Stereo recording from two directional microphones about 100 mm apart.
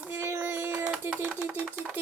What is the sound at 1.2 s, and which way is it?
Speech, 10° right (ahead or behind).